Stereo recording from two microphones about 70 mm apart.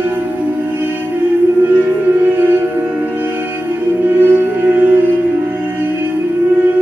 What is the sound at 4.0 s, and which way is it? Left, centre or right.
Music, right.